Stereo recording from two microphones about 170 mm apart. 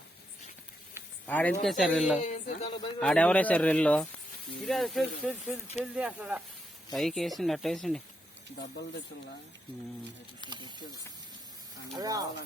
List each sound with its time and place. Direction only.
1.3 s speech: 10° left (ahead or behind)
2.2 s speech: 45° left (ahead or behind)
3.0 s speech: 5° left (ahead or behind)
5.8 s speech: 5° right (ahead or behind)
10.6 s speech: 20° left (ahead or behind)
11.9 s speech: 20° right (ahead or behind)